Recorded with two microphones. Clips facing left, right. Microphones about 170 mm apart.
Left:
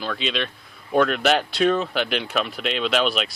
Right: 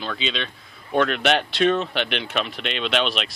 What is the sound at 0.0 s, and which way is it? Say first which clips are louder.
Speech: left 2 dB; centre (ahead or behind).